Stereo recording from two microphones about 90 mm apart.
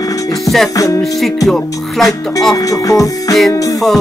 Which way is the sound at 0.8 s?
35° left (ahead or behind).